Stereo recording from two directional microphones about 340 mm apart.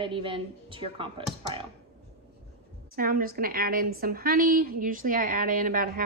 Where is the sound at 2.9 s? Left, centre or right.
Right.